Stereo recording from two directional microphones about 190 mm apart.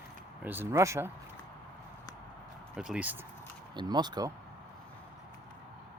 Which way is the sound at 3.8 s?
20° right (ahead or behind).